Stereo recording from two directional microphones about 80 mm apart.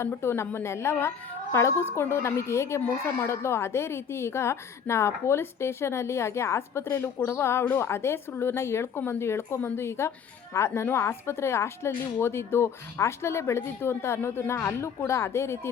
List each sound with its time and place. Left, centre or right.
0.0 s a woman's voice: left
9.6 s speech: left
9.8 s a woman's voice: left